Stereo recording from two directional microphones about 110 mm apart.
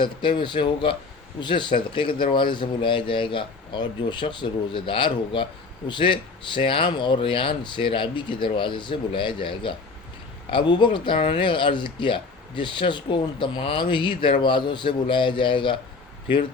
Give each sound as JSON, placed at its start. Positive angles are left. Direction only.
{"t": 0.0, "sound": "speech", "side_deg": 50}